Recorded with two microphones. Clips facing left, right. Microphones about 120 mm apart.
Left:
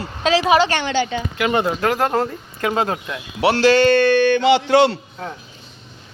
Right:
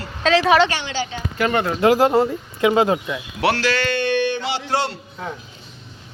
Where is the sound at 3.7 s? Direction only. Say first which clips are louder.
Left 9 dB; 35° left (ahead or behind).